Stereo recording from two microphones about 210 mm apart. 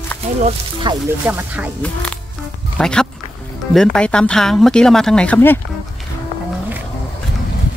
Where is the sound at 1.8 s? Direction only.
5° left (ahead or behind).